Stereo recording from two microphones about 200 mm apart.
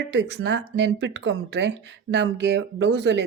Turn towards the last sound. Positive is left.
turn(degrees=-60)  # may be behind; listen again after turning